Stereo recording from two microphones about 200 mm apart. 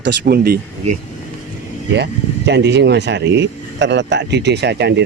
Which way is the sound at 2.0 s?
60° right (ahead or behind).